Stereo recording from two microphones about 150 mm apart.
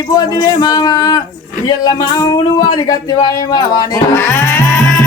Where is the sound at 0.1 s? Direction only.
25° left (ahead or behind).